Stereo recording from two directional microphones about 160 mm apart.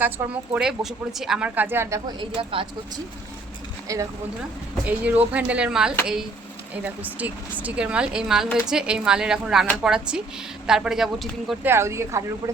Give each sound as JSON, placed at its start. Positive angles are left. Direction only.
{"t": 0.2, "sound": "speech", "side_deg": -15}
{"t": 0.5, "sound": "speech", "side_deg": -5}
{"t": 2.4, "sound": "speech", "side_deg": -35}
{"t": 3.9, "sound": "speech", "side_deg": -20}
{"t": 4.9, "sound": "speech", "side_deg": -10}
{"t": 11.6, "sound": "speech", "side_deg": -15}